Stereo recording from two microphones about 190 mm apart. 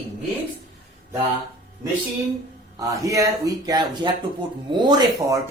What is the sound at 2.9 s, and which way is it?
Speech, 15° right (ahead or behind).